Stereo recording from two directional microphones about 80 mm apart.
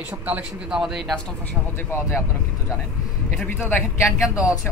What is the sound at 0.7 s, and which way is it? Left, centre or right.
Speech, centre.